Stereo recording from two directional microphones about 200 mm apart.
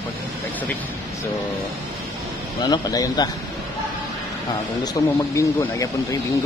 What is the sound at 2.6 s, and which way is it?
Speech, 20° left (ahead or behind).